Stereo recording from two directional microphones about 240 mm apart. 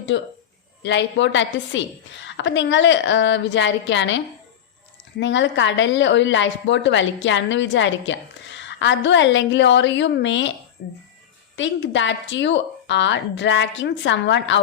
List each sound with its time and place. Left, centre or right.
0.1 s a woman's voice: left
5.2 s a woman's voice: left